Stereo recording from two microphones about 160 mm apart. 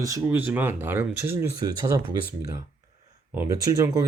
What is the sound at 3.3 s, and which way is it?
Speech, 20° right (ahead or behind).